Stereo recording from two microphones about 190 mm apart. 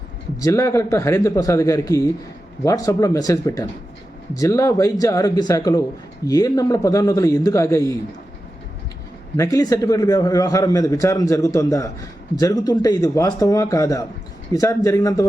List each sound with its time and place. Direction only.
0.3 s a man's voice: 15° left (ahead or behind)
9.4 s a man's voice: 20° left (ahead or behind)